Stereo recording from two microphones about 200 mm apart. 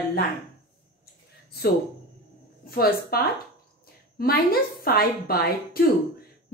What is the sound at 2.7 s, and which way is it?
A woman's voice, 50° left (ahead or behind).